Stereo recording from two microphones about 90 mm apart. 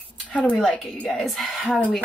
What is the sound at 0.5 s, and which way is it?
Speech, 5° left (ahead or behind).